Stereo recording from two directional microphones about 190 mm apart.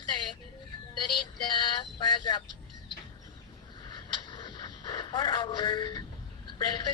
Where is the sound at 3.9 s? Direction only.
25° left (ahead or behind).